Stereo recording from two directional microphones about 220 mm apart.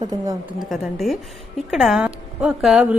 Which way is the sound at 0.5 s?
Centre (ahead or behind).